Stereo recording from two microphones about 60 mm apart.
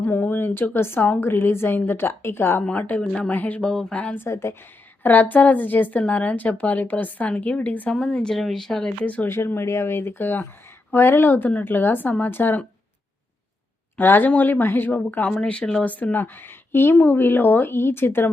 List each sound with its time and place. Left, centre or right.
0.0 s speech: left
2.6 s speech: left
3.6 s speech: centre
4.0 s speech: left
4.3 s a woman's voice: left
5.0 s speech: left; by 8.9 s centre
9.2 s speech: left
14.0 s speech: left
15.3 s speech: centre; by 18.3 s left